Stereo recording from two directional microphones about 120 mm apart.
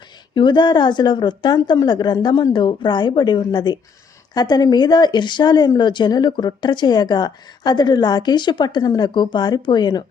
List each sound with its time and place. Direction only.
0.3 s speech: 40° left (ahead or behind)